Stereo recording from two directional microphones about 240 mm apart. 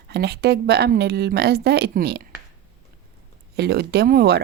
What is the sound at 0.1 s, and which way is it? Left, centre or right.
Speech, right.